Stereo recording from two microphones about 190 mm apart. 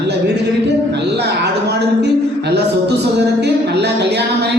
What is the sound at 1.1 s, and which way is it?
Speech, 60° right (ahead or behind).